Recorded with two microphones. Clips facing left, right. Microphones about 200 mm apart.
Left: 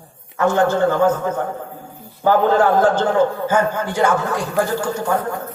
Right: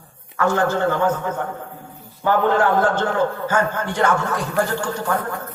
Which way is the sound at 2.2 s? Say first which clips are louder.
Left 3 dB; 35° left (ahead or behind).